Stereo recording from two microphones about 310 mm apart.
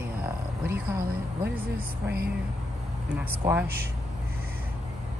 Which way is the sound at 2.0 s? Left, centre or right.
Right.